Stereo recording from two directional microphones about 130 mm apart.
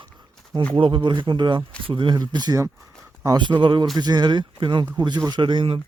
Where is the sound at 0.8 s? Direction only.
40° right (ahead or behind).